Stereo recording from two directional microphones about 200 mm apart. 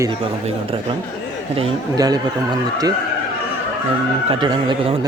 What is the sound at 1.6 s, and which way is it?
Speech, 20° right (ahead or behind).